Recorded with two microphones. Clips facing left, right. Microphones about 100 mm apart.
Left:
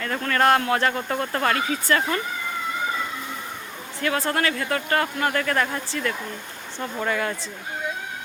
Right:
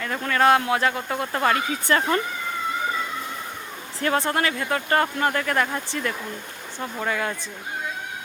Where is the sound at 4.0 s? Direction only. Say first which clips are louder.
Right 1 dB; 25° right (ahead or behind).